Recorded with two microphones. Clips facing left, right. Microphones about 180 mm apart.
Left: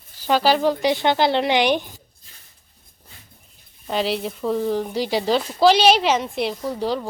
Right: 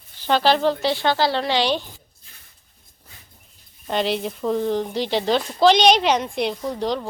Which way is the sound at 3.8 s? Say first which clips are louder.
Even; centre (ahead or behind).